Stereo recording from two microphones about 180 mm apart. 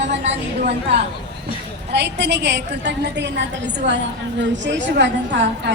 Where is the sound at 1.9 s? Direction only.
70° right (ahead or behind).